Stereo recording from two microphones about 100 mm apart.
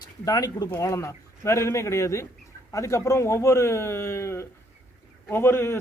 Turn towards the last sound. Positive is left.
turn(degrees=25)  # may be behind; listen again after turning